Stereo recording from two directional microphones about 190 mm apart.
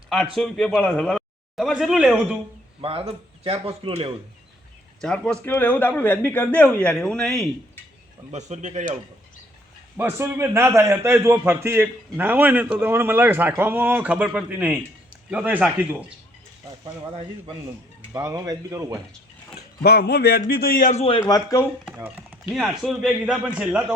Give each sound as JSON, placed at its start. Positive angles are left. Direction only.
{"t": 0.3, "sound": "speech", "side_deg": 0}
{"t": 2.8, "sound": "speech", "side_deg": -30}
{"t": 4.9, "sound": "speech", "side_deg": 5}
{"t": 8.3, "sound": "speech", "side_deg": -40}
{"t": 10.0, "sound": "a man's voice", "side_deg": -10}
{"t": 18.1, "sound": "a man's voice", "side_deg": -15}
{"t": 19.5, "sound": "a man's voice", "side_deg": 60}
{"t": 21.2, "sound": "speech", "side_deg": 20}
{"t": 22.4, "sound": "speech", "side_deg": 0}